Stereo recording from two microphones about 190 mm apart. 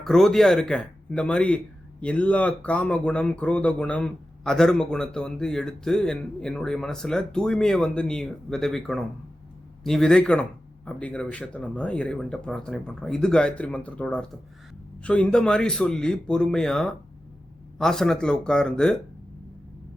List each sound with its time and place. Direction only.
0.0 s speech: centre (ahead or behind)